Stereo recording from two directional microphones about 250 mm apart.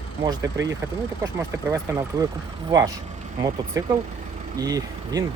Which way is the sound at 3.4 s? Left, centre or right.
Centre.